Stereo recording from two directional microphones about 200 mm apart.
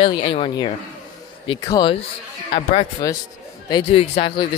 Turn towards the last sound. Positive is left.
turn(degrees=25)  # may be behind; listen again after turning